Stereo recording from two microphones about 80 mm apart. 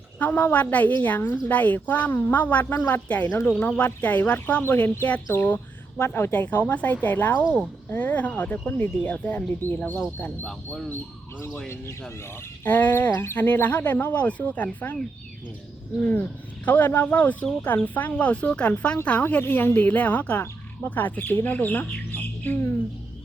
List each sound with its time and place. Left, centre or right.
0.2 s speech: left
12.6 s speech: left
16.6 s speech: left